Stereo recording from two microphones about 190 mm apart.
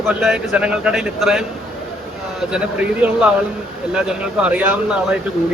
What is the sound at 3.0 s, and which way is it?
Speech, 5° right (ahead or behind).